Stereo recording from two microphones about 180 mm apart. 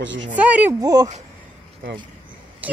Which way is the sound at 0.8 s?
20° right (ahead or behind).